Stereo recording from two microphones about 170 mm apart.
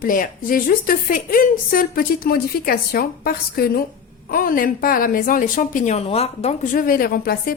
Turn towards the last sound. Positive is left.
turn(degrees=60)  # may be behind; listen again after turning